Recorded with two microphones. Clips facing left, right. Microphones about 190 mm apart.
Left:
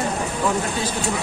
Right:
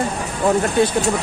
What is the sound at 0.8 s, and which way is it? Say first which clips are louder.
Speech: right 10 dB; 60° right (ahead or behind).